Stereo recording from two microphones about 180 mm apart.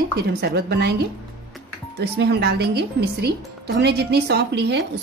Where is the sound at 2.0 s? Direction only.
65° right (ahead or behind).